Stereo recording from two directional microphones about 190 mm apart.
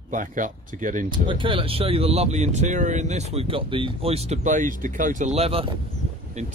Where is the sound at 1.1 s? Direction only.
25° right (ahead or behind); by 5.3 s 45° right (ahead or behind).